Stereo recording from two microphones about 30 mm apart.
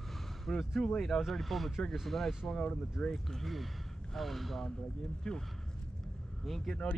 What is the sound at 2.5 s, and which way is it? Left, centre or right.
Speech, left.